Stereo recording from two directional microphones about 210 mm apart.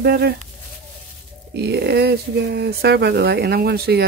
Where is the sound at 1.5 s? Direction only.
50° right (ahead or behind).